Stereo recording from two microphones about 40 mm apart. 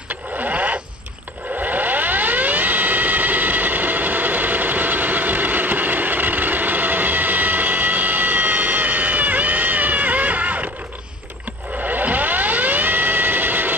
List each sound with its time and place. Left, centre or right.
0.1 s a sound: right
1.6 s vehicle: right
11.8 s vehicle: right